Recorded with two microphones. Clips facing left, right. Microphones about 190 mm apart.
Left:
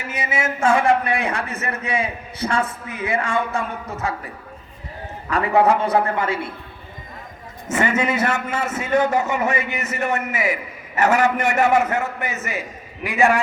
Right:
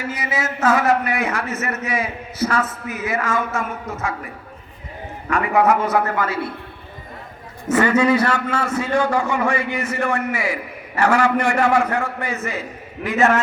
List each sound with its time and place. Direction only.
0.1 s a man's voice: 25° left (ahead or behind)
5.3 s a man's voice: 35° left (ahead or behind)
7.7 s a man's voice: 25° left (ahead or behind)